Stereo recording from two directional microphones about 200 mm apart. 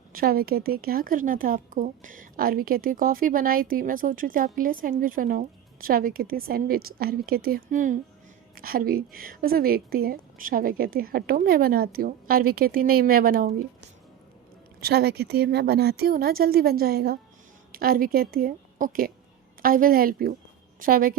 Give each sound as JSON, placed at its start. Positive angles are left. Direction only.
{"t": 0.1, "sound": "a woman's voice", "side_deg": -45}
{"t": 14.8, "sound": "a woman's voice", "side_deg": -50}